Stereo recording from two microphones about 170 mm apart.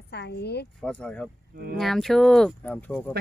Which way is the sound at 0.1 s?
80° left.